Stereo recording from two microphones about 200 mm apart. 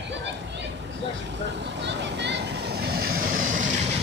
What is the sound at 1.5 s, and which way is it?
Vehicle, 60° right (ahead or behind).